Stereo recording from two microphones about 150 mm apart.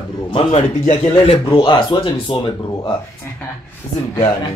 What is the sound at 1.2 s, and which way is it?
Speech, 40° left (ahead or behind).